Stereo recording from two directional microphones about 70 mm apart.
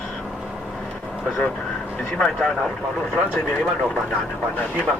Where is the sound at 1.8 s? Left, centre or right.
Centre.